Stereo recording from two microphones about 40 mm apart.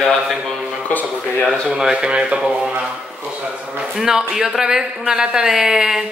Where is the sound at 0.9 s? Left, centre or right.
Left.